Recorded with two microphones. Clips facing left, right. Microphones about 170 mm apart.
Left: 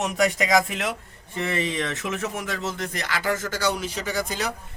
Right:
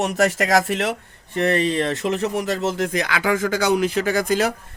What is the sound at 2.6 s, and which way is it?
Speech, 60° right (ahead or behind).